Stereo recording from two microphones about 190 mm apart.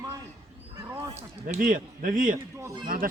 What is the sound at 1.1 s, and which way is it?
A man's voice, 40° right (ahead or behind).